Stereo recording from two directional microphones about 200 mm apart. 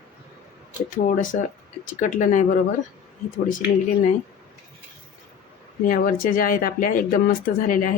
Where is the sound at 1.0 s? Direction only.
40° left (ahead or behind).